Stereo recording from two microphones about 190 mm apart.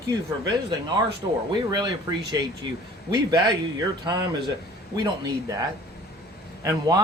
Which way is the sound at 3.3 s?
20° right (ahead or behind).